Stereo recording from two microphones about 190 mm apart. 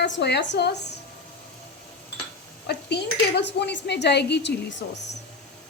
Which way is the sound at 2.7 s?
60° left (ahead or behind).